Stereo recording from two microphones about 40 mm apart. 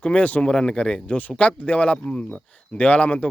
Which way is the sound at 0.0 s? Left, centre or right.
Left.